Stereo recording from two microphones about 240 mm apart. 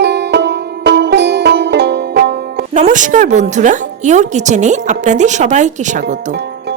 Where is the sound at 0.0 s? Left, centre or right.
Right.